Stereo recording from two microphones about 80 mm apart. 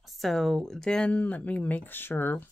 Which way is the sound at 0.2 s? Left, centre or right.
Centre.